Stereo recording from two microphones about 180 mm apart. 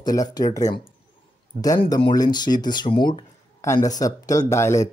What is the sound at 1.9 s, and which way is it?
Speech, 25° left (ahead or behind).